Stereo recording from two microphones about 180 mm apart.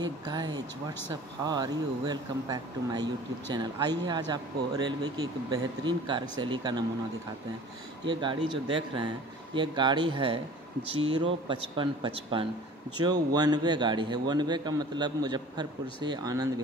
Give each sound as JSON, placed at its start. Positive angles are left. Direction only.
{"t": 0.0, "sound": "a man's voice", "side_deg": -25}
{"t": 8.1, "sound": "a man's voice", "side_deg": -25}